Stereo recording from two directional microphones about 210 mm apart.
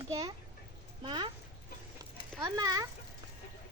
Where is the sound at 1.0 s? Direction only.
25° right (ahead or behind).